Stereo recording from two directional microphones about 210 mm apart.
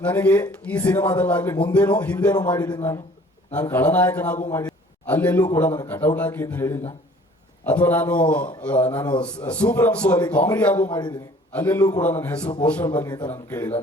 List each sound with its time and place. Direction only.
0.0 s a man's voice: 5° left (ahead or behind)
2.3 s a man's voice: 20° left (ahead or behind)
4.5 s a sound: 10° left (ahead or behind)
5.5 s a man's voice: 5° left (ahead or behind)
10.8 s a man's voice: 20° left (ahead or behind)
11.5 s a man's voice: 10° left (ahead or behind)
12.9 s a man's voice: 20° left (ahead or behind)